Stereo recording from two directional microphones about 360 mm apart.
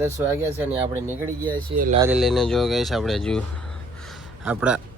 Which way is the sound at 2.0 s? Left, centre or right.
Centre.